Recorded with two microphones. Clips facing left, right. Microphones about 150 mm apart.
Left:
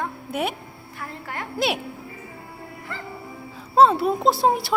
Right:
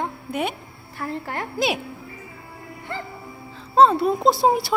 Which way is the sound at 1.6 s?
Centre (ahead or behind).